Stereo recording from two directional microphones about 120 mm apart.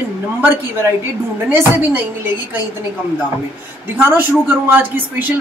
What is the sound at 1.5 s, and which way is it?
Speech, 20° right (ahead or behind).